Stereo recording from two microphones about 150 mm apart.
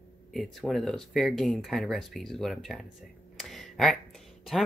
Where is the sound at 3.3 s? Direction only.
Centre (ahead or behind).